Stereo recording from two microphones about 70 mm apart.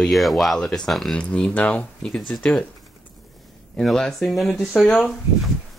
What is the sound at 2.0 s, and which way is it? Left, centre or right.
Speech, centre.